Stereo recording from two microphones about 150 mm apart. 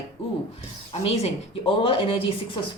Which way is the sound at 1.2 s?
40° left (ahead or behind).